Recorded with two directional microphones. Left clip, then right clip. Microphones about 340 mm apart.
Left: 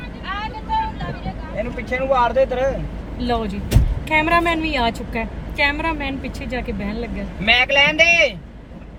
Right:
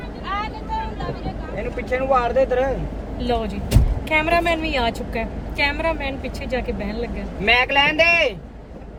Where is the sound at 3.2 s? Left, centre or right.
Centre.